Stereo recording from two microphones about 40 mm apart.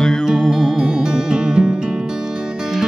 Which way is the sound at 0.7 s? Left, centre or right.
Centre.